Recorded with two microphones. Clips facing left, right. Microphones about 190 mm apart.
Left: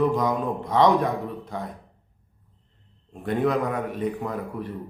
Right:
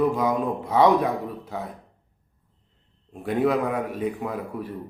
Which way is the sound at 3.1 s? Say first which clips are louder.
Right 1 dB; 5° right (ahead or behind).